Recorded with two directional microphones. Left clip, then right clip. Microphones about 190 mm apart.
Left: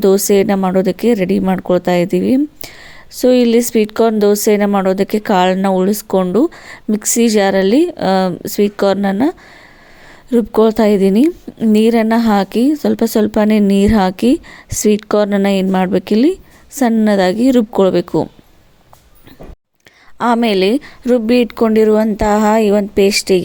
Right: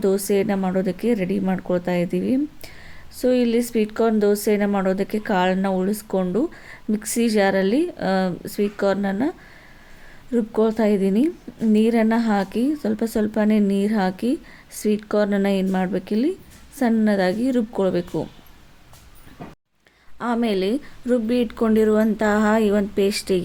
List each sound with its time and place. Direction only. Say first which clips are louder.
0.0 s speech: left 9 dB; 35° left (ahead or behind)
10.3 s speech: left 9 dB; 40° left (ahead or behind)
20.1 s speech: left 10 dB; 40° left (ahead or behind)